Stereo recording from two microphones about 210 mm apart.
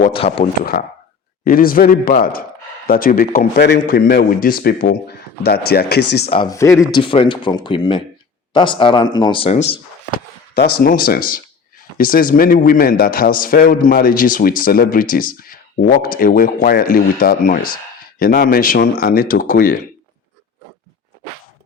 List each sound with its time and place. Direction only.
0.1 s speech: 25° left (ahead or behind)
0.6 s a man's voice: 45° left (ahead or behind)
6.3 s speech: 20° left (ahead or behind)
10.5 s a man's voice: 45° left (ahead or behind)